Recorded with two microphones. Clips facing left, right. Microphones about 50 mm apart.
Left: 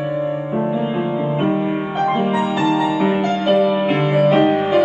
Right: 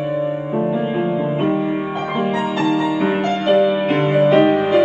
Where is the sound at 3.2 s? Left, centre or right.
Right.